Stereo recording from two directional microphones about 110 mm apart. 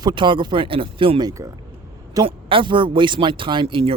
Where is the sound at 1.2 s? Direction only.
35° right (ahead or behind).